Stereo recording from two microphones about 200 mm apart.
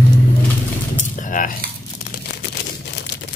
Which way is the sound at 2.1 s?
55° left (ahead or behind).